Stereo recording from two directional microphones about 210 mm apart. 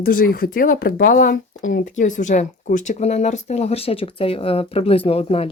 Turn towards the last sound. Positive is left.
turn(degrees=25)  # may be behind; listen again after turning